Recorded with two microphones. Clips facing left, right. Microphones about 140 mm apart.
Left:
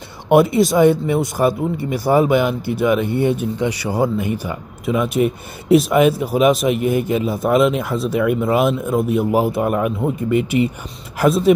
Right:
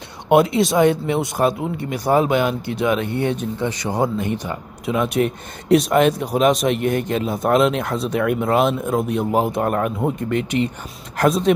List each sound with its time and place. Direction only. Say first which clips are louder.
0.3 s speech: left 2 dB; centre (ahead or behind)